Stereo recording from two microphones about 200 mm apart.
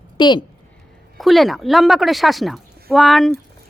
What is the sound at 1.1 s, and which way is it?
A woman's voice, centre (ahead or behind).